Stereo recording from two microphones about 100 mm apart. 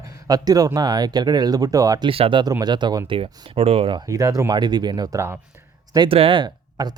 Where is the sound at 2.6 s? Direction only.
50° right (ahead or behind); by 4.0 s 70° right (ahead or behind).